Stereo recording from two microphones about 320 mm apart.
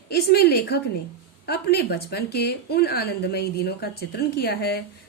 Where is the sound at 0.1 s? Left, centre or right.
Left.